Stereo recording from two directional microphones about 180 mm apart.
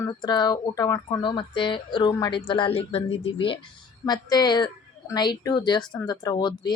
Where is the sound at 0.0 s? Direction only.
20° left (ahead or behind).